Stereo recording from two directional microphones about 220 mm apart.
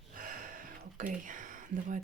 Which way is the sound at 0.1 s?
40° right (ahead or behind).